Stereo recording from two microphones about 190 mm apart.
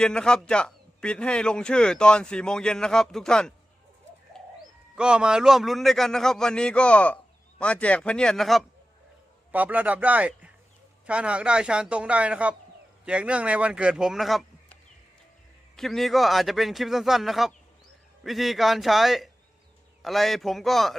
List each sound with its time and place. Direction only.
0.0 s a man's voice: 5° left (ahead or behind)
4.4 s bird: 5° left (ahead or behind)
4.9 s a man's voice: 5° right (ahead or behind)